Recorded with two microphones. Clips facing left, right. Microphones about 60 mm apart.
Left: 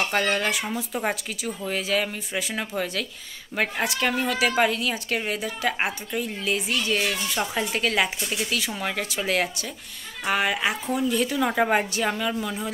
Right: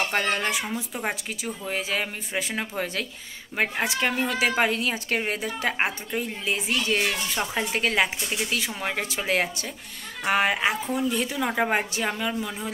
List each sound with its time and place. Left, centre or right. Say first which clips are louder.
0.1 s speech: left 1 dB; right